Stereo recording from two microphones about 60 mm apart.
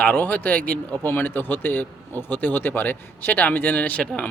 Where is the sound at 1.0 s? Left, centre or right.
Left.